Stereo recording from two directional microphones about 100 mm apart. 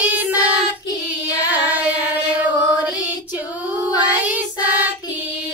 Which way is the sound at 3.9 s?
15° right (ahead or behind).